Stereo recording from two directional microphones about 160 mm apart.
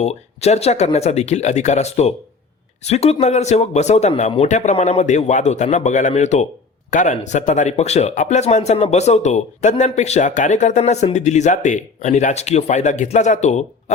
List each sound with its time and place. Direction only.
0.0 s speech: 40° left (ahead or behind)